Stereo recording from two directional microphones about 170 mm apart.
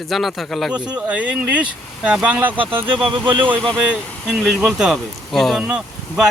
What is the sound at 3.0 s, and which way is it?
Speech, 30° right (ahead or behind).